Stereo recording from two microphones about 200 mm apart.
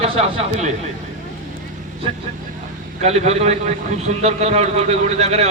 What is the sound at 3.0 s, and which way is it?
A man's voice, 35° right (ahead or behind).